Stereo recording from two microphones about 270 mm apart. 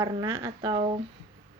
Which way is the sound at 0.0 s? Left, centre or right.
Centre.